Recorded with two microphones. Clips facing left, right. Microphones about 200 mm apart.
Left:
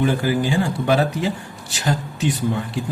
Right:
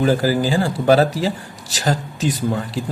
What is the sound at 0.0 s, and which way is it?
Speech, 35° right (ahead or behind).